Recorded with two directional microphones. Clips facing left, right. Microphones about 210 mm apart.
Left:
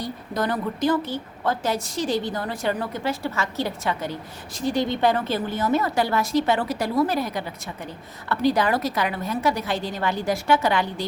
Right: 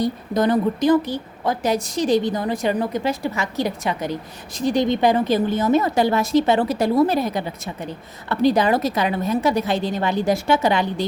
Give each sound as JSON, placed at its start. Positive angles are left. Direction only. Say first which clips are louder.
{"t": 0.0, "sound": "a woman's voice", "louder": "right 7 dB", "side_deg": -20}